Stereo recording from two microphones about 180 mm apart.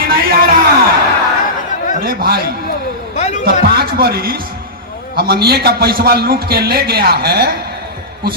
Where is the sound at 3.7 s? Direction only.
60° right (ahead or behind).